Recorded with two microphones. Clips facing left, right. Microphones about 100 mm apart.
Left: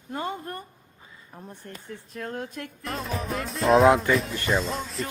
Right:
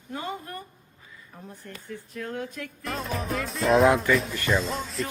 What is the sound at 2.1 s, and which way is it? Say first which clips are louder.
Speech: even; 35° left (ahead or behind).